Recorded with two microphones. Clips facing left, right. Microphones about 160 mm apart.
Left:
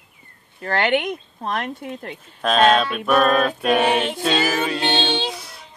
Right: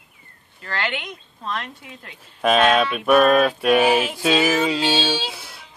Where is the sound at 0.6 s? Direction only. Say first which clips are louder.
Left 8 dB; 55° left (ahead or behind).